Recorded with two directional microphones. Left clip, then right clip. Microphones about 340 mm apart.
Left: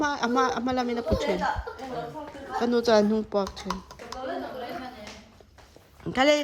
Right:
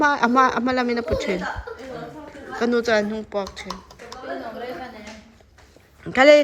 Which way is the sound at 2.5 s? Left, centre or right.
Centre.